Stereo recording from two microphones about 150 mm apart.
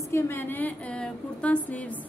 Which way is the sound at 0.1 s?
15° left (ahead or behind).